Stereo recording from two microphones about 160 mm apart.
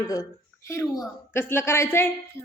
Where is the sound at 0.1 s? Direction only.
20° left (ahead or behind).